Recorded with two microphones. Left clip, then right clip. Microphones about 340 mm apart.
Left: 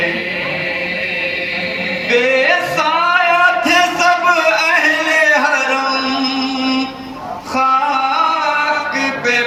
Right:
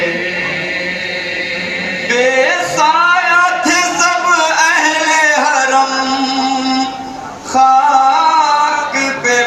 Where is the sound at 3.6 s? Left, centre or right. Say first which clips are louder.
Even; centre.